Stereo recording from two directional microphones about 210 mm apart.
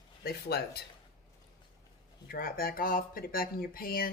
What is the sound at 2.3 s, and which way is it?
Speech, 45° left (ahead or behind).